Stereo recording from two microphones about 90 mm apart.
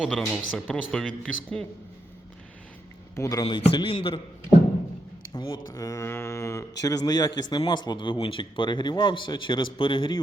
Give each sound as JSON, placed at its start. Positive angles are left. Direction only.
{"t": 0.1, "sound": "speech", "side_deg": 5}
{"t": 3.2, "sound": "speech", "side_deg": 40}
{"t": 3.4, "sound": "a man's voice", "side_deg": 65}
{"t": 5.5, "sound": "a man's voice", "side_deg": 40}